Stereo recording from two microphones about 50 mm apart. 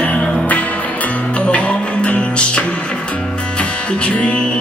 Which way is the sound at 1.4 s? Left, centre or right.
Left.